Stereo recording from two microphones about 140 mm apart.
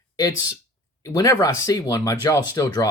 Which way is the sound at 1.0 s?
25° left (ahead or behind).